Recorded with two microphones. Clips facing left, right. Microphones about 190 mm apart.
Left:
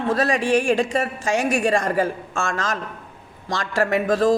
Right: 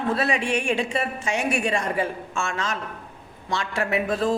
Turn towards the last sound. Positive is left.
turn(degrees=40)  # may be behind; listen again after turning